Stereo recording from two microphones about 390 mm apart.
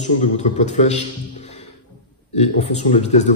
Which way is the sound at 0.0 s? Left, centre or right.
Centre.